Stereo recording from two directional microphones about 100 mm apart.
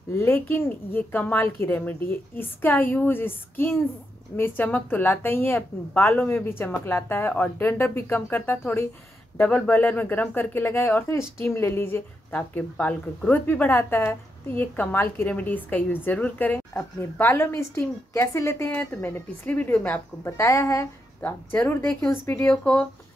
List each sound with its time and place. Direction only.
0.1 s a woman's voice: 25° left (ahead or behind)
20.2 s a woman's voice: 30° left (ahead or behind)
21.2 s speech: 20° left (ahead or behind)
22.5 s a woman's voice: 5° left (ahead or behind)